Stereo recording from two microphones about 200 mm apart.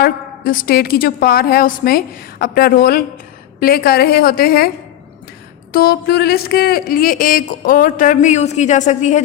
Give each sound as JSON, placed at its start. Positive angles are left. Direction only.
{"t": 0.0, "sound": "speech", "side_deg": 45}
{"t": 5.7, "sound": "speech", "side_deg": 50}